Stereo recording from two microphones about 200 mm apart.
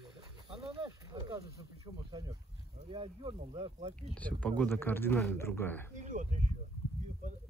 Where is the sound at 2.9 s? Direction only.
25° right (ahead or behind).